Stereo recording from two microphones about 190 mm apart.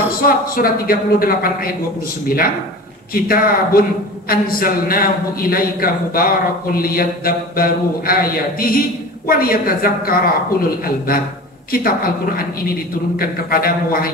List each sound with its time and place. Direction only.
0.6 s a man's voice: 50° left (ahead or behind)